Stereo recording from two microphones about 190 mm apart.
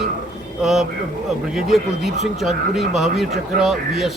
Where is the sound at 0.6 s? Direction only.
Centre (ahead or behind).